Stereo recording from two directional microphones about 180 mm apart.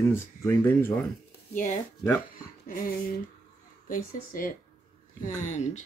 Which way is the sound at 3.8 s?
50° left (ahead or behind).